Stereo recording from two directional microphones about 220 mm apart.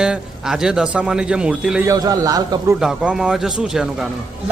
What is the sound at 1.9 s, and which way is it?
Speech, 15° right (ahead or behind).